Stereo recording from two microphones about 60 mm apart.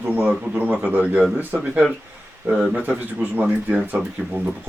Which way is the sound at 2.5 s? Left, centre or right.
Centre.